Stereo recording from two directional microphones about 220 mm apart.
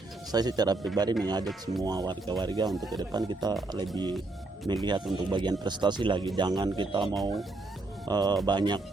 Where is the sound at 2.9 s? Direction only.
20° right (ahead or behind).